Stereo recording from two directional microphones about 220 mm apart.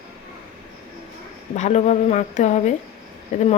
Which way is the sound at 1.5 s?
30° left (ahead or behind).